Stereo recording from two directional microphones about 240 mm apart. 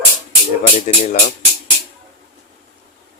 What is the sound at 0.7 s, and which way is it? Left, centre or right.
Speech, left.